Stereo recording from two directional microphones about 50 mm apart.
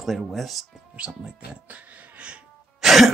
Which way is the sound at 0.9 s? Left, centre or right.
Right.